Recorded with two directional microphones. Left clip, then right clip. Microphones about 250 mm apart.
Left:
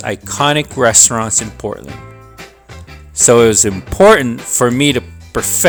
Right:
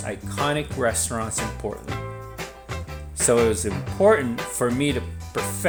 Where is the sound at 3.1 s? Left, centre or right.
Left.